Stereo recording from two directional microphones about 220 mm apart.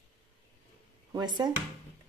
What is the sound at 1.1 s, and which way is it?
Speech, 20° right (ahead or behind).